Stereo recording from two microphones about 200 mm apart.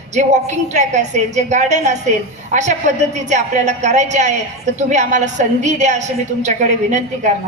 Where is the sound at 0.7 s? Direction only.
35° right (ahead or behind).